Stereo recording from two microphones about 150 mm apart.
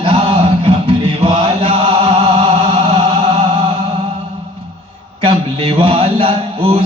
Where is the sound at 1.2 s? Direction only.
40° right (ahead or behind).